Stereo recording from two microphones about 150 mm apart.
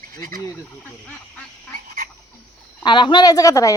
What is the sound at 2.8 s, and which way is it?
Speech, 30° left (ahead or behind).